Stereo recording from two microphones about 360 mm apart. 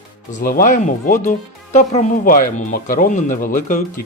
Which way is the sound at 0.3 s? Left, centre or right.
Left.